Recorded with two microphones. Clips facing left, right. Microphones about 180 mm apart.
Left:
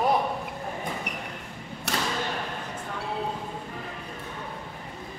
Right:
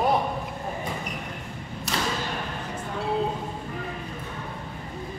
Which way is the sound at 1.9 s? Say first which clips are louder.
Right 1 dB; 65° left (ahead or behind).